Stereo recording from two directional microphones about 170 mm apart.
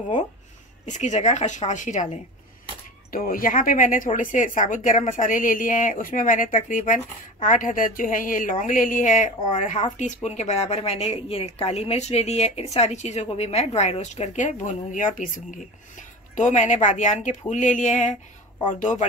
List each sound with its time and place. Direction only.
0.8 s speech: 45° left (ahead or behind)
3.1 s speech: 55° left (ahead or behind)